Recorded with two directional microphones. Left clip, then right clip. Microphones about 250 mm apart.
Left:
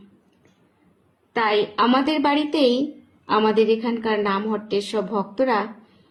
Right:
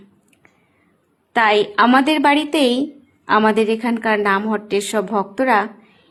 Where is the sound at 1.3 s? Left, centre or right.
Right.